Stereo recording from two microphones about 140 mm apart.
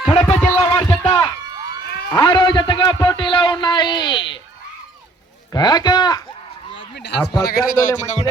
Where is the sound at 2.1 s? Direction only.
35° left (ahead or behind).